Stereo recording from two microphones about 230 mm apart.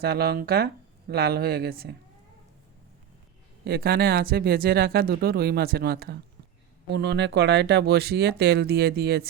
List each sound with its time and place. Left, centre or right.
0.0 s speech: right
3.6 s speech: right